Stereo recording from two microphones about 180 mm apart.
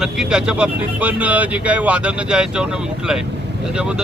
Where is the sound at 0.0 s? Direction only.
5° right (ahead or behind).